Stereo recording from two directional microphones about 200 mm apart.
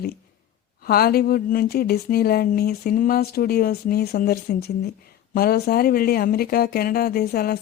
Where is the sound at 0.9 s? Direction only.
50° left (ahead or behind).